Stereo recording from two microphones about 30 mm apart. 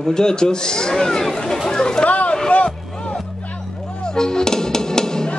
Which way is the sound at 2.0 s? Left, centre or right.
Left.